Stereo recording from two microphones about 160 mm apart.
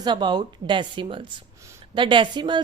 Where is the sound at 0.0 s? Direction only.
30° right (ahead or behind).